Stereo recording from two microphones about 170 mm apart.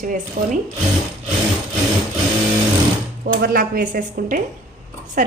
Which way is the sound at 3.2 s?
60° right (ahead or behind).